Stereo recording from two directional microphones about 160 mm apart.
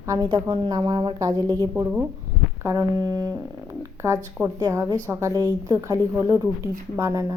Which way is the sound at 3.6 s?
20° right (ahead or behind).